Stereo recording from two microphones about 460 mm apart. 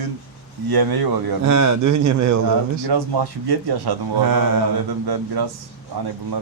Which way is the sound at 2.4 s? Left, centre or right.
Right.